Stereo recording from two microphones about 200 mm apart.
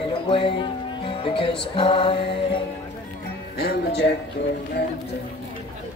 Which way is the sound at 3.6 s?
55° left (ahead or behind).